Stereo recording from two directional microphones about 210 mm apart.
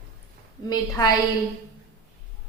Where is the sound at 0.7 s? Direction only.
15° left (ahead or behind).